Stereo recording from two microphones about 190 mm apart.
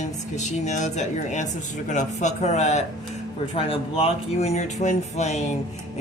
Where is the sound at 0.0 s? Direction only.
40° left (ahead or behind).